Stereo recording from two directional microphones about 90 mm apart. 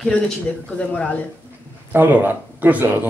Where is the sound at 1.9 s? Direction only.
20° right (ahead or behind).